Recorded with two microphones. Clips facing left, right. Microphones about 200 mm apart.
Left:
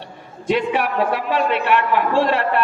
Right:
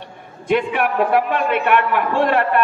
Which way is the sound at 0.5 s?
50° right (ahead or behind).